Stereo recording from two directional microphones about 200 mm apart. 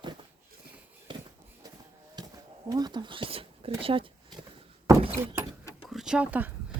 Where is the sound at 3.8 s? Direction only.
25° right (ahead or behind).